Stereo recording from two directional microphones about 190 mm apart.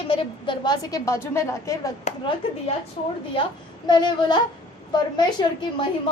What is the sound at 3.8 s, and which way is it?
A woman's voice, 25° left (ahead or behind).